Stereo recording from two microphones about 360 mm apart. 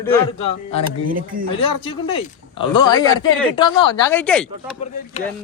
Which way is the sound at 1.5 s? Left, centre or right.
Centre.